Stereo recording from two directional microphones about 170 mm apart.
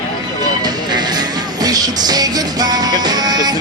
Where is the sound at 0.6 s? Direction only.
25° right (ahead or behind).